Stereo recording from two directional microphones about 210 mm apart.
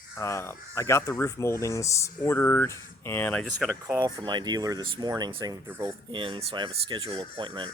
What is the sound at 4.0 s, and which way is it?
Speech, 20° right (ahead or behind).